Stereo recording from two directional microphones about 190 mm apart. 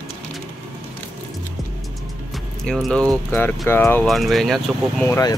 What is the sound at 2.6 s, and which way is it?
Speech, 5° left (ahead or behind).